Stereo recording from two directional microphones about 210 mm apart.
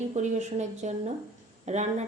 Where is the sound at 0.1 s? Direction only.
35° right (ahead or behind).